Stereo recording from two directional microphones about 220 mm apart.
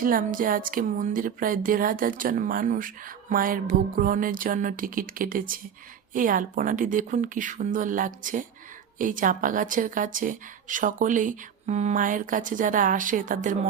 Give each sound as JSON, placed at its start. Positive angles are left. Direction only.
{"t": 0.0, "sound": "speech", "side_deg": -40}